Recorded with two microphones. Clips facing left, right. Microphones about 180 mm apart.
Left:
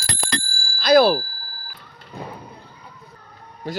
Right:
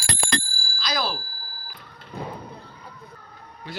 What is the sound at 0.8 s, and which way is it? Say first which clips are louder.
Bicycle bell: left 14 dB; 60° left (ahead or behind).